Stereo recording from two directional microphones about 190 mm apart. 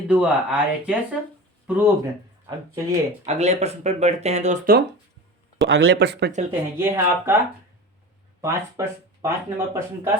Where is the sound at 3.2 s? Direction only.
35° right (ahead or behind).